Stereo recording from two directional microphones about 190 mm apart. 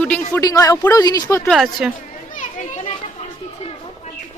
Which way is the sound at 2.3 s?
40° left (ahead or behind).